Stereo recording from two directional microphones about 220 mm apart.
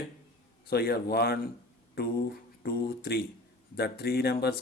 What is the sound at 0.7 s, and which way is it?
Speech, 45° left (ahead or behind).